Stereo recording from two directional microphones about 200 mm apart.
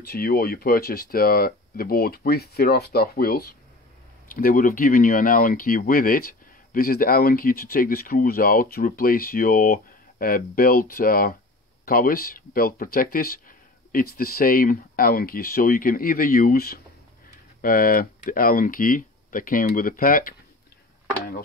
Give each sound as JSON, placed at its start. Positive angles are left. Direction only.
{"t": 0.0, "sound": "speech", "side_deg": 50}